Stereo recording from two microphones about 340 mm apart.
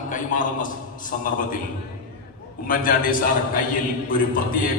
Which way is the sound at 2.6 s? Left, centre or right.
Left.